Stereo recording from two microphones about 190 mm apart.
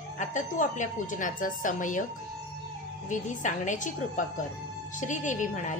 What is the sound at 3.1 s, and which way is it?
A woman's voice, 40° left (ahead or behind).